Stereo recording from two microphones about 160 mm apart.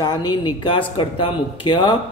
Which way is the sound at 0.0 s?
25° left (ahead or behind).